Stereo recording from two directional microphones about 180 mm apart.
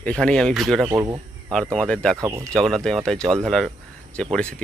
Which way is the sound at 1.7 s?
5° left (ahead or behind).